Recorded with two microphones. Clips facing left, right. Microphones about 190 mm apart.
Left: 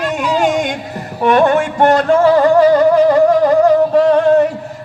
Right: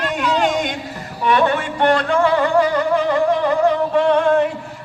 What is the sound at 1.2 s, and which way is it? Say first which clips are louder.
Music: left 6 dB; 45° left (ahead or behind).